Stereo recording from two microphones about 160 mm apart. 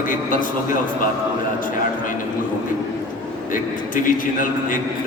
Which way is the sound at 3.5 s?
60° left (ahead or behind).